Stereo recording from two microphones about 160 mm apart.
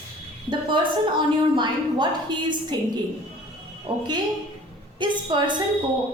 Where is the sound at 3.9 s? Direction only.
30° right (ahead or behind).